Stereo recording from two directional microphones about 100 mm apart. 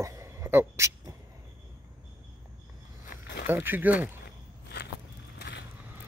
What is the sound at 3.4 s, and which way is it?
Speech, 20° right (ahead or behind).